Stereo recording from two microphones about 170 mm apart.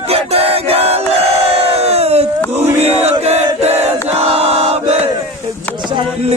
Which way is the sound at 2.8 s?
40° right (ahead or behind).